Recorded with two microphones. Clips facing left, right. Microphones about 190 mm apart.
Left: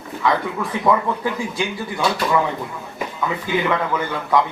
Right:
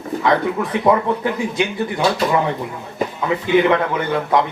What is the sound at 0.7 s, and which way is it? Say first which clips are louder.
Speech: right 2 dB; 20° right (ahead or behind).